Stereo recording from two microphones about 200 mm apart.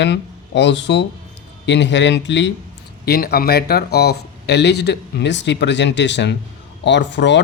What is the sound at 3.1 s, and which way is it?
Speech, 50° left (ahead or behind).